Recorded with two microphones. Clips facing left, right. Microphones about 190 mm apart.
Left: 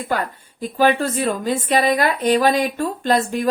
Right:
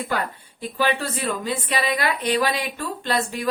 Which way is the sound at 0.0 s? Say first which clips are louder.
Left 3 dB; 45° left (ahead or behind).